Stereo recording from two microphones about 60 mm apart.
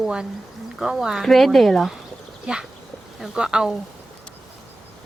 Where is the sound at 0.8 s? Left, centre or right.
Centre.